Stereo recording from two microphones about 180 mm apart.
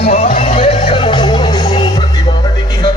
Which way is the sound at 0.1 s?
35° left (ahead or behind).